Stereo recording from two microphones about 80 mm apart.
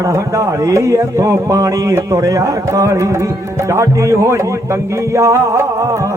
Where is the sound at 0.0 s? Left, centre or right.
Right.